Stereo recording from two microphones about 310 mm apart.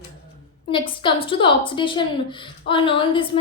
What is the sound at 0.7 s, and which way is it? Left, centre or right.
A woman's voice, centre.